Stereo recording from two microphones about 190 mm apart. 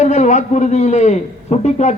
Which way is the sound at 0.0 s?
40° left (ahead or behind).